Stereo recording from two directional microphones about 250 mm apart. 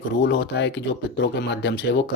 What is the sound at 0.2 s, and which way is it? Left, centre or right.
Speech, left.